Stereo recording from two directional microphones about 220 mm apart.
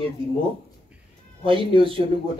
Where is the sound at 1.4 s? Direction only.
25° right (ahead or behind).